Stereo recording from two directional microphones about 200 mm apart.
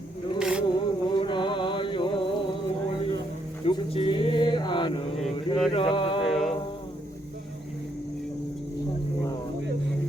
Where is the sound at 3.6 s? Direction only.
30° left (ahead or behind).